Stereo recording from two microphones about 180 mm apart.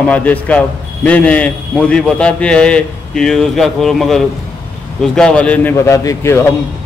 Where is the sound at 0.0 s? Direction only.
10° left (ahead or behind).